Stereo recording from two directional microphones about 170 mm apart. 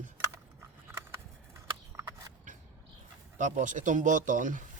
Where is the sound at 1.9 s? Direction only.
15° right (ahead or behind).